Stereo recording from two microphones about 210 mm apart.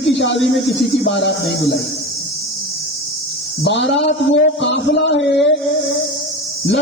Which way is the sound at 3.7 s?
55° left (ahead or behind).